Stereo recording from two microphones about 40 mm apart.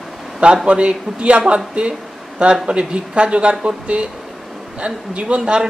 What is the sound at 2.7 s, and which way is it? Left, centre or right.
Speech, right.